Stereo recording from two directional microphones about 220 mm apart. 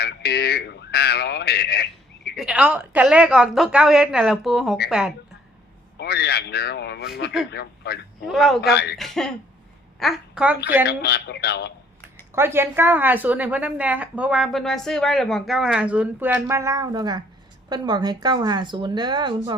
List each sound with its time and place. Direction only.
0.0 s radio: 50° left (ahead or behind)
2.3 s a woman's voice: 5° right (ahead or behind)
6.0 s speech: 45° left (ahead or behind)
8.3 s a woman's voice: centre (ahead or behind)
8.7 s speech: 50° left (ahead or behind)
9.0 s a woman's voice: centre (ahead or behind)
10.8 s speech: 45° left (ahead or behind)
12.3 s a woman's voice: 10° right (ahead or behind)